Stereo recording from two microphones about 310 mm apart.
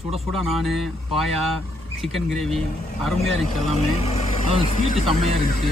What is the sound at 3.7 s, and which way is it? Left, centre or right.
Speech, centre.